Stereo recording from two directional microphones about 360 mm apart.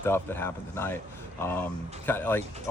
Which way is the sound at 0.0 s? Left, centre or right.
Centre.